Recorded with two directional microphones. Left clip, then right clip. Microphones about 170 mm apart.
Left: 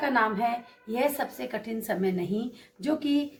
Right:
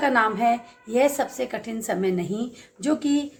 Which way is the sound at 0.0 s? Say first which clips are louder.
Right 5 dB; 50° right (ahead or behind).